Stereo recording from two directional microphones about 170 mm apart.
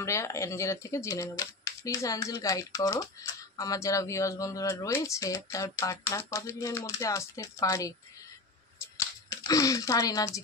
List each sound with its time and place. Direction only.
0.0 s speech: 15° left (ahead or behind)
8.9 s speech: 20° left (ahead or behind)